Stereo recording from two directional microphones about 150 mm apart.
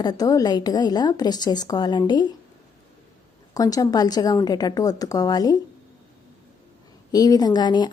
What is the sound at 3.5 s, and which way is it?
Speech, 25° left (ahead or behind).